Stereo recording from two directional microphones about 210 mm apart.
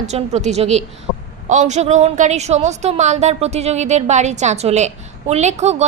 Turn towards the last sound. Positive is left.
turn(degrees=-30)  # may be behind; listen again after turning